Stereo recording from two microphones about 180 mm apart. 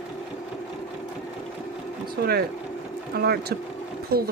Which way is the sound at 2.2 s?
60° right (ahead or behind).